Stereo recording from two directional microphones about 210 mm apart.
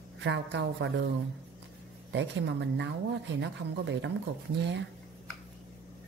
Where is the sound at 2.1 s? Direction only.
60° right (ahead or behind).